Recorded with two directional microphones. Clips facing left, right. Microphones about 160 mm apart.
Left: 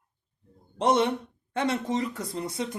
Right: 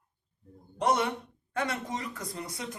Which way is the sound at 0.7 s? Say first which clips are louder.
Left 4 dB; 25° left (ahead or behind).